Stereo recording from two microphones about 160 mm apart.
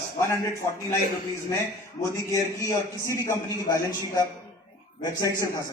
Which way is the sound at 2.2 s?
20° left (ahead or behind).